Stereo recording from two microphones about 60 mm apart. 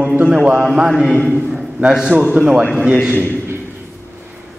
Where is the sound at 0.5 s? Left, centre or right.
Centre.